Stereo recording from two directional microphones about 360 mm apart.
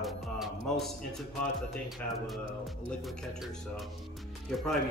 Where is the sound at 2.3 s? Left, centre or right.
Centre.